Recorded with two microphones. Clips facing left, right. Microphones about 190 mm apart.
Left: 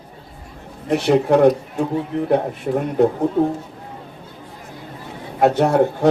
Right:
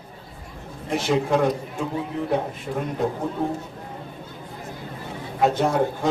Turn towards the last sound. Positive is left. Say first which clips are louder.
# left 6 dB
turn(degrees=65)  # may be behind; listen again after turning